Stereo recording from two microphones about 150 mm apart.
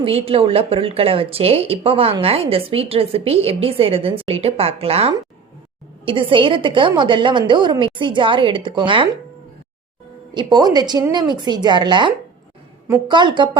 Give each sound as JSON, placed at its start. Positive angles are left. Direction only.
{"t": 0.0, "sound": "a woman's voice", "side_deg": -40}
{"t": 10.3, "sound": "a woman's voice", "side_deg": -25}